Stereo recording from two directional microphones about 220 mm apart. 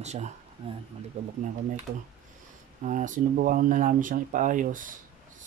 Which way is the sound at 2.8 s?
35° right (ahead or behind).